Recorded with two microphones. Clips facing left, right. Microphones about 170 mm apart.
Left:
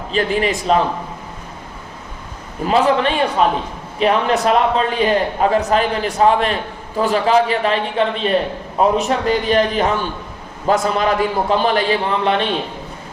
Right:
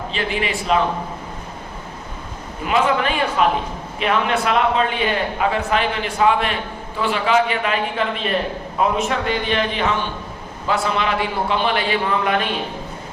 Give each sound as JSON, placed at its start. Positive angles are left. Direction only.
{"t": 0.1, "sound": "a man's voice", "side_deg": 40}
{"t": 2.6, "sound": "a man's voice", "side_deg": 35}